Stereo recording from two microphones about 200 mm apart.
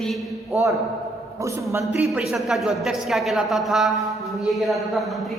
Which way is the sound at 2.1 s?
Centre (ahead or behind).